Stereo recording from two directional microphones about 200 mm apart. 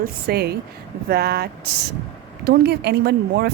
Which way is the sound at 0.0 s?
50° right (ahead or behind).